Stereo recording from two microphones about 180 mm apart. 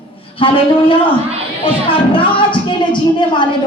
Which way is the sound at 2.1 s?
25° left (ahead or behind).